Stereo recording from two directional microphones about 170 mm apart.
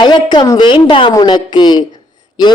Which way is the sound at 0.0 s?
25° left (ahead or behind).